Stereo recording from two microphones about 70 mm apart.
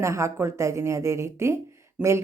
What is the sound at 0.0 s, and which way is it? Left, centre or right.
A woman's voice, right.